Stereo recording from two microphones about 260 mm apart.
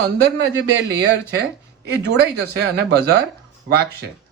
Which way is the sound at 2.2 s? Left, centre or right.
Right.